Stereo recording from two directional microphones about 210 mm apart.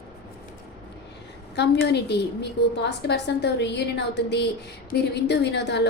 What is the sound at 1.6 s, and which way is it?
A woman's voice, 55° left (ahead or behind).